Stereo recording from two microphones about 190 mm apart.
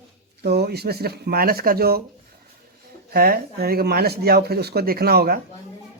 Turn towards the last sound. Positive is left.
turn(degrees=-55)  # may be behind; listen again after turning